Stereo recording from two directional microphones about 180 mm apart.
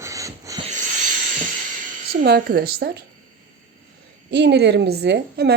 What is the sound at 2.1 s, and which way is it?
Speech, 60° right (ahead or behind).